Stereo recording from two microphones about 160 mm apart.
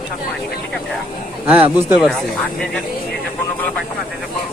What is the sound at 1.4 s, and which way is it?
Speech, 10° right (ahead or behind).